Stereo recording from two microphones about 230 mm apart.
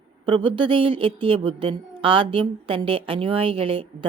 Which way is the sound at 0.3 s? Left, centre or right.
Right.